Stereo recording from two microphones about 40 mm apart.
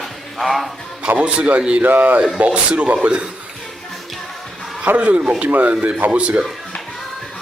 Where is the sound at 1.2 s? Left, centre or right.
Right.